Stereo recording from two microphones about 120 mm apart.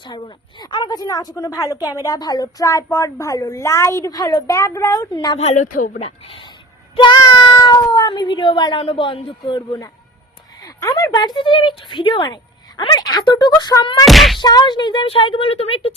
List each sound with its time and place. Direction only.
0.6 s speech: 40° left (ahead or behind)
5.4 s a woman's voice: 80° left
6.1 s speech: 50° left (ahead or behind); by 14.0 s 35° left (ahead or behind)
14.0 s a sound: centre (ahead or behind)
14.3 s speech: 35° left (ahead or behind); by 16.0 s 55° left (ahead or behind)